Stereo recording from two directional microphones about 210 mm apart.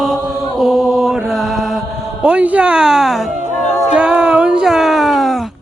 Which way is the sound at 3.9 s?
5° right (ahead or behind).